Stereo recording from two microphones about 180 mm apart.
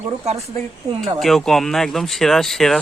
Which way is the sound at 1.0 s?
Centre (ahead or behind).